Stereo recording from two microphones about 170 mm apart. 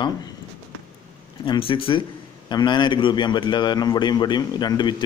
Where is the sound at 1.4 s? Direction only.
30° left (ahead or behind).